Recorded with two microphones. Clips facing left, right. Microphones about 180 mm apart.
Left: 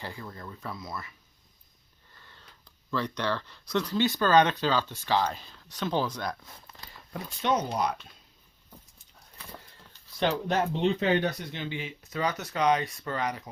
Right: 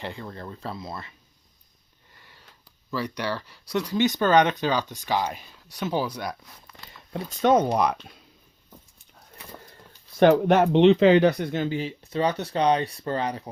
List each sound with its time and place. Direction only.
0.0 s speech: 25° right (ahead or behind)
2.1 s sniff: 15° right (ahead or behind)
2.9 s speech: 10° right (ahead or behind)
6.4 s speech: 25° left (ahead or behind)
7.4 s speech: 55° right (ahead or behind)
10.2 s speech: 55° right (ahead or behind); by 13.5 s 30° right (ahead or behind)